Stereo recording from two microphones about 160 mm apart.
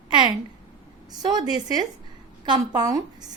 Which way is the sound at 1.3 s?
25° right (ahead or behind).